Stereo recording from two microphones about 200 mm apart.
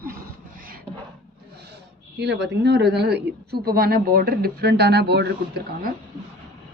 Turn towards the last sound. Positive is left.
turn(degrees=-55)  # may be behind; listen again after turning